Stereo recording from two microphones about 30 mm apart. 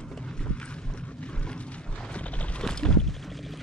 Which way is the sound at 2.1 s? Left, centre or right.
Left.